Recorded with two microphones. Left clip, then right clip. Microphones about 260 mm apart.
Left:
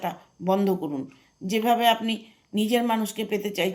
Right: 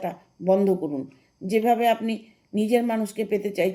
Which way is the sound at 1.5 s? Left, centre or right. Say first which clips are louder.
Right 1 dB; left.